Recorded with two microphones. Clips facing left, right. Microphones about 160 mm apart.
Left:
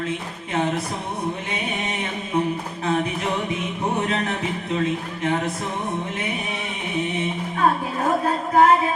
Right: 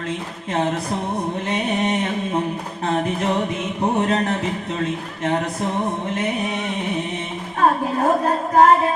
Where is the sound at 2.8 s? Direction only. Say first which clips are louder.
Right 1 dB; 45° right (ahead or behind).